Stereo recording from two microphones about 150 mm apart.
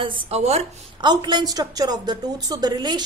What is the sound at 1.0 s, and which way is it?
A woman's voice, 30° right (ahead or behind).